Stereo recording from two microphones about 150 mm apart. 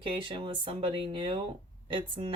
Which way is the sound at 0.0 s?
35° right (ahead or behind).